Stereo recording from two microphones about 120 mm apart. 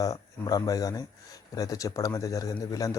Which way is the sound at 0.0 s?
30° left (ahead or behind).